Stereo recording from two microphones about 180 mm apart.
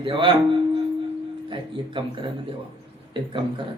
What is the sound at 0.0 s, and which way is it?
Speech, 30° right (ahead or behind).